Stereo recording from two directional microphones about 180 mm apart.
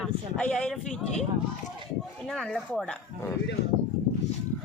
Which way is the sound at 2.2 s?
5° left (ahead or behind).